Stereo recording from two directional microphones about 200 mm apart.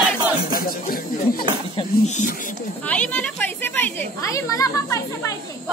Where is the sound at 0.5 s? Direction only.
45° left (ahead or behind).